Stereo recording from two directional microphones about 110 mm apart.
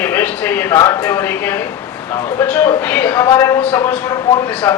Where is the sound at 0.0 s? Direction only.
20° left (ahead or behind).